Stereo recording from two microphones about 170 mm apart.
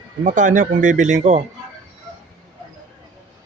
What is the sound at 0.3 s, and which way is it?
Speech, 50° right (ahead or behind).